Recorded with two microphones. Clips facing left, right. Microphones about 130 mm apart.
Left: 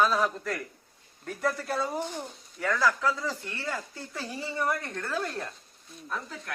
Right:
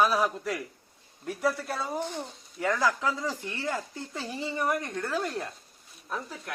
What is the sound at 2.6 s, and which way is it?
A man's voice, 20° right (ahead or behind).